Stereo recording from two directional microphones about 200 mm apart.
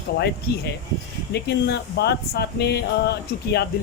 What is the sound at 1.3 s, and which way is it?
Speech, 55° left (ahead or behind).